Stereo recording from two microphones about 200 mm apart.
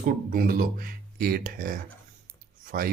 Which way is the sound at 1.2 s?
50° right (ahead or behind).